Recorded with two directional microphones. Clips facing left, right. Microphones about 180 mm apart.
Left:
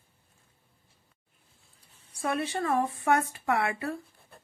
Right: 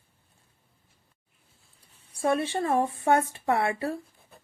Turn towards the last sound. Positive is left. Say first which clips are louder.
# right 3 dB
turn(degrees=-30)  # may be behind; listen again after turning